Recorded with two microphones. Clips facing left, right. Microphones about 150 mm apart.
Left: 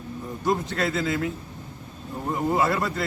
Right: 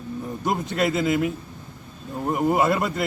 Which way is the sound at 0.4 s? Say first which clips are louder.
Right 1 dB; 20° right (ahead or behind).